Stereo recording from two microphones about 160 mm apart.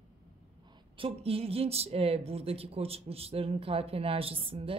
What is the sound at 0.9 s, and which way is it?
Speech, 35° right (ahead or behind).